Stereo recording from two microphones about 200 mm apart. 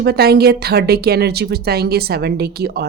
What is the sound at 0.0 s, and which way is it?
A woman's voice, 50° right (ahead or behind).